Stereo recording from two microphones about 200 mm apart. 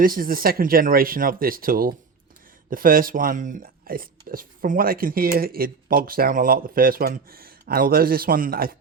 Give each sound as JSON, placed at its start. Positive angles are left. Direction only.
{"t": 0.0, "sound": "speech", "side_deg": -45}